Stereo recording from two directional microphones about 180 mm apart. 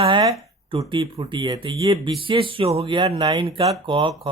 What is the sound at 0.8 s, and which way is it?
Speech, 25° right (ahead or behind).